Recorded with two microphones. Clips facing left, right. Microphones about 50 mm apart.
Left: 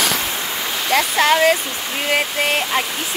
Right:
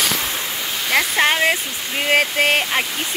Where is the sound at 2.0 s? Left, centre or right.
Right.